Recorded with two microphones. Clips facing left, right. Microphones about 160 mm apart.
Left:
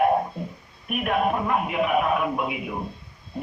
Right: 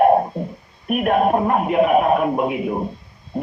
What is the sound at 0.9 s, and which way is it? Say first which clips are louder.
A man's voice: right 7 dB; 45° right (ahead or behind).